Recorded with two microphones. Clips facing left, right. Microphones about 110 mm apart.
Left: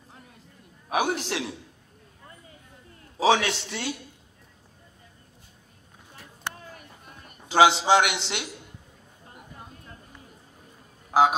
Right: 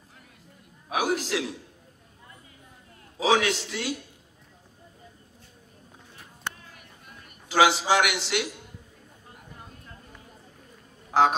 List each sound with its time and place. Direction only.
0.9 s a man's voice: 30° left (ahead or behind)
3.2 s a man's voice: 30° left (ahead or behind)
6.5 s a sound: 35° left (ahead or behind)
11.1 s vehicle: 5° left (ahead or behind)